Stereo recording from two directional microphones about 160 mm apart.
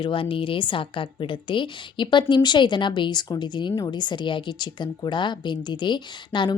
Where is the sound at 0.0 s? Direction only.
35° left (ahead or behind).